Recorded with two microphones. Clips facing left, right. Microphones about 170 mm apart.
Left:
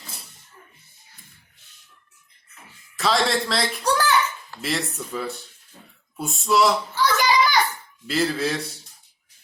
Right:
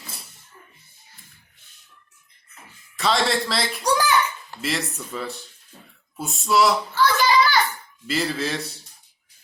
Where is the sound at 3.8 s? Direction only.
15° right (ahead or behind).